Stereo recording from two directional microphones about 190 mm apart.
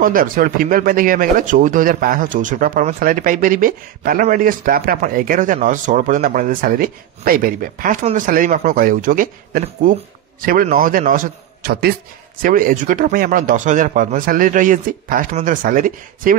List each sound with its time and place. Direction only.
0.0 s speech: 45° right (ahead or behind)